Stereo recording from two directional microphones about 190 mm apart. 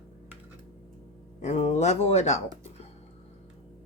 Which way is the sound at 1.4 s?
35° left (ahead or behind).